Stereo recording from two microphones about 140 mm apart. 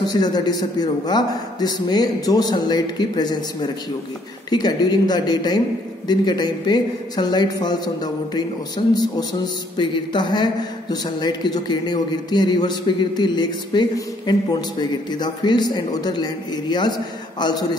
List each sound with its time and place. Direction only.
0.1 s a man's voice: 30° left (ahead or behind)